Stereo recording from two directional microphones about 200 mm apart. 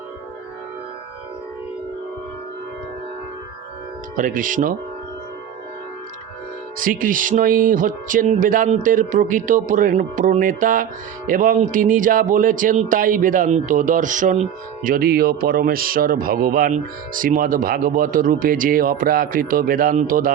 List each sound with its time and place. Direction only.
4.1 s music: 40° right (ahead or behind)
6.7 s music: 45° right (ahead or behind)
14.8 s speech: 45° right (ahead or behind)